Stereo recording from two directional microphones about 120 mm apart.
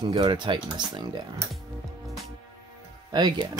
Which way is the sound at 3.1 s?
35° right (ahead or behind).